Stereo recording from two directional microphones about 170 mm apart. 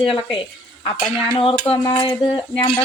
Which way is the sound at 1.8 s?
30° left (ahead or behind).